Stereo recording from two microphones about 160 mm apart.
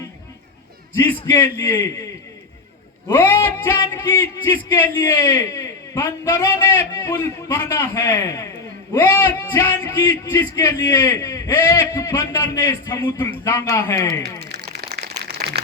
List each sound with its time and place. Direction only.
1.2 s a man's voice: 20° left (ahead or behind)
3.1 s a man's voice: 15° left (ahead or behind)
14.3 s crumpling: 80° right